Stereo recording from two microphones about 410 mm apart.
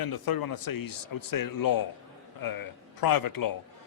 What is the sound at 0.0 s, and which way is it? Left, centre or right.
A man's voice, left.